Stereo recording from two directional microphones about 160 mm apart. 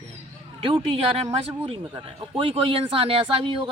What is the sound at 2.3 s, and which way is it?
Speech, 35° right (ahead or behind).